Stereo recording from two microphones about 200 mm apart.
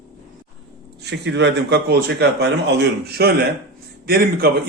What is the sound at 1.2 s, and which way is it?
A man's voice, 60° right (ahead or behind).